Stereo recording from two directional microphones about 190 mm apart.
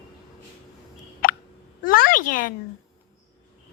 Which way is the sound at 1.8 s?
50° left (ahead or behind).